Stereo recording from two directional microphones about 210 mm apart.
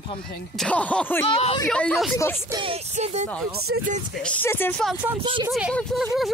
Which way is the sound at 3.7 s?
55° right (ahead or behind).